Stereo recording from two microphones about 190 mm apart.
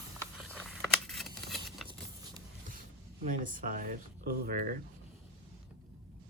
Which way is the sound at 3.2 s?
45° right (ahead or behind).